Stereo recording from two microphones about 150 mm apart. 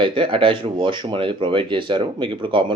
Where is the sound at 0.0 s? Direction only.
35° right (ahead or behind).